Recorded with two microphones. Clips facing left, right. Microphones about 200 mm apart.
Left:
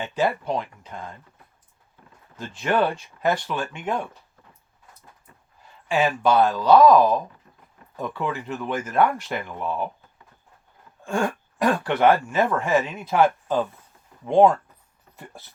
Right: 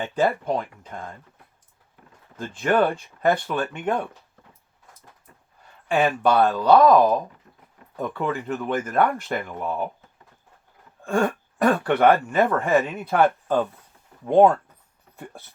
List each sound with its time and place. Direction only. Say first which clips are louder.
0.0 s speech: right 2 dB; 55° right (ahead or behind)
2.3 s speech: right 2 dB; 50° right (ahead or behind)
5.9 s speech: even; 55° right (ahead or behind)
11.6 s speech: right 1 dB; 55° right (ahead or behind)
14.3 s speech: right 1 dB; 5° right (ahead or behind)